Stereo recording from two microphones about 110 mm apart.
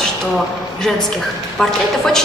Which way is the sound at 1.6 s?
5° left (ahead or behind).